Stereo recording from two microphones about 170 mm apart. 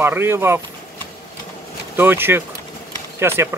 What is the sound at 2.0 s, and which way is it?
Speech, 15° right (ahead or behind).